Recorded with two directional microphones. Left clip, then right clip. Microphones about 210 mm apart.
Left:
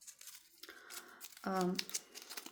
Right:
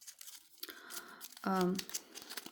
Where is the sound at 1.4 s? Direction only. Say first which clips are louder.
Right 3 dB; 40° right (ahead or behind).